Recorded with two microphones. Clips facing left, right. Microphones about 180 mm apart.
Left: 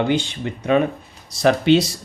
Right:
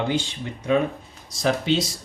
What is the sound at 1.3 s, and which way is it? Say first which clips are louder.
Speech: left 7 dB; 65° left (ahead or behind).